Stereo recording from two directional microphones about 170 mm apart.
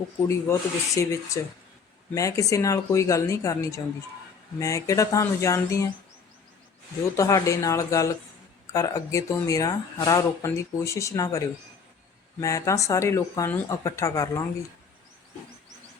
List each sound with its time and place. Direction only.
0.2 s speech: 15° left (ahead or behind)
7.2 s speech: 20° left (ahead or behind)